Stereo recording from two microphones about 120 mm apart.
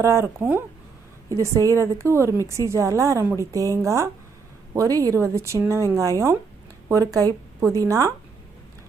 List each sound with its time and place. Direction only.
0.0 s a woman's voice: 20° right (ahead or behind)